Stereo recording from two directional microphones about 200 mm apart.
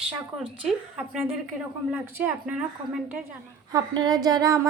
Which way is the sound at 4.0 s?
20° right (ahead or behind).